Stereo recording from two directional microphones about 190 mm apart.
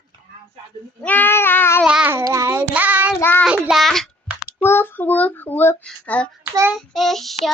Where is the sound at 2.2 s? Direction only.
20° right (ahead or behind).